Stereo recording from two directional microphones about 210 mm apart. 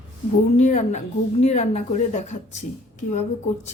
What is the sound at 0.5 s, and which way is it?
A woman's voice, 35° left (ahead or behind).